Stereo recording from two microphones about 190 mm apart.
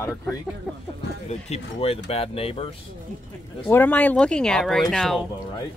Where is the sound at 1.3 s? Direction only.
35° left (ahead or behind).